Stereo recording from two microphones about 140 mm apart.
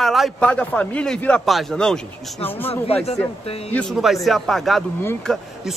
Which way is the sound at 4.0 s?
Centre (ahead or behind).